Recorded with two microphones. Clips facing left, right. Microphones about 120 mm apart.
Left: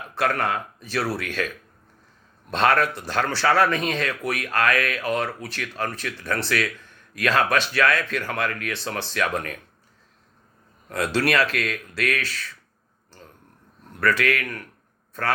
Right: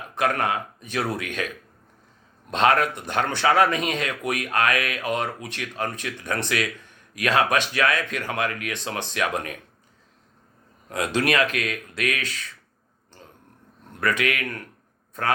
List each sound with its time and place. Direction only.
0.1 s speech: 20° right (ahead or behind)
2.5 s speech: 20° right (ahead or behind)
10.8 s speech: 15° right (ahead or behind)
14.0 s speech: 20° right (ahead or behind)